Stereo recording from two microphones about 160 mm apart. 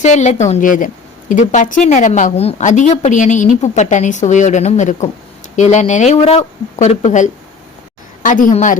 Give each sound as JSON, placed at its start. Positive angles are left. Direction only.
{"t": 0.0, "sound": "a woman's voice", "side_deg": 45}